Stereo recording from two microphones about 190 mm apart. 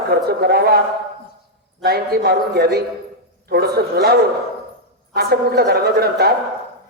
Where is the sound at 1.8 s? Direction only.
55° right (ahead or behind).